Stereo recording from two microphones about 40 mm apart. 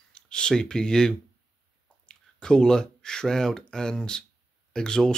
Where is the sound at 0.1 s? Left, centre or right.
Left.